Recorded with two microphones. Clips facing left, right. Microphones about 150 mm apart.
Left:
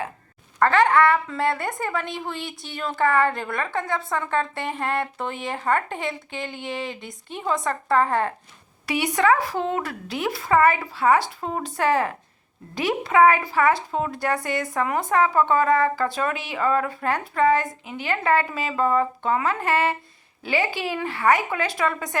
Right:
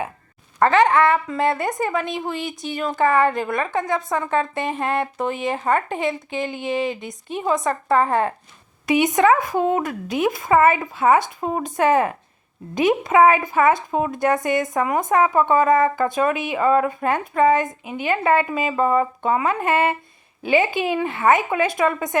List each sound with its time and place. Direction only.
0.6 s a woman's voice: 20° right (ahead or behind)